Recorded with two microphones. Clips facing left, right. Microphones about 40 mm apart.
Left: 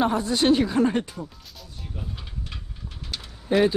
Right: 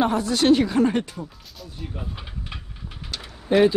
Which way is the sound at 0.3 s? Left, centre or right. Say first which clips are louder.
Right 3 dB; right.